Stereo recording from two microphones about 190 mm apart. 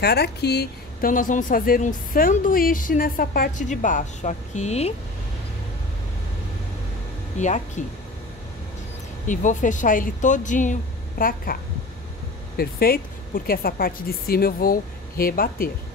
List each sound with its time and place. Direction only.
0.0 s a woman's voice: 60° left (ahead or behind); by 4.9 s 35° left (ahead or behind)
7.3 s speech: 40° left (ahead or behind)
9.3 s speech: 40° left (ahead or behind)
12.5 s a woman's voice: 55° left (ahead or behind)